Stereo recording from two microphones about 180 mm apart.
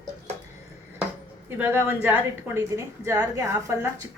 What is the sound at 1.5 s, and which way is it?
A woman's voice, 10° right (ahead or behind).